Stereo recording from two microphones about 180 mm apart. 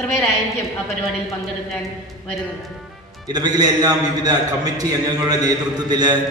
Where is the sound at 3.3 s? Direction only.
20° right (ahead or behind).